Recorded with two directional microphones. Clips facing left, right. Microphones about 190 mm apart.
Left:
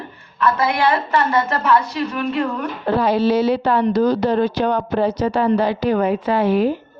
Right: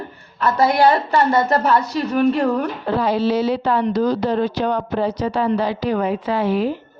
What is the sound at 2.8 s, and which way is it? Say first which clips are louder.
A woman's voice: left 4 dB; 60° left (ahead or behind).